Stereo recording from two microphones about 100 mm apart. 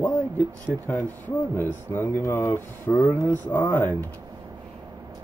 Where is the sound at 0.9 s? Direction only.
20° left (ahead or behind).